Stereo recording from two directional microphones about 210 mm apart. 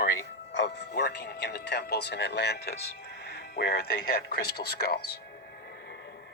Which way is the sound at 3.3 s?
50° left (ahead or behind).